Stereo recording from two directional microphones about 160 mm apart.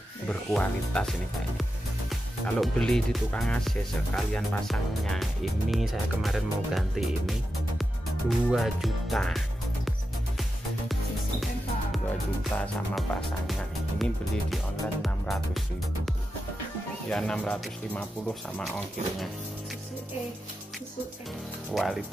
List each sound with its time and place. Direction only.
0.3 s speech: 10° left (ahead or behind)
2.4 s speech: 5° left (ahead or behind)
12.4 s speech: 5° left (ahead or behind)
17.1 s speech: 5° left (ahead or behind)
21.7 s speech: centre (ahead or behind)